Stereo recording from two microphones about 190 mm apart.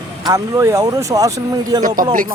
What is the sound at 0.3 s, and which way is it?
Speech, 15° right (ahead or behind).